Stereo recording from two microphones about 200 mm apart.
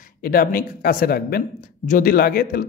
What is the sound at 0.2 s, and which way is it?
A man's voice, 45° left (ahead or behind).